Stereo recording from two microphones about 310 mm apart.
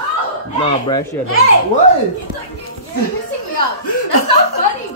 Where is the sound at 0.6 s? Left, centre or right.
Centre.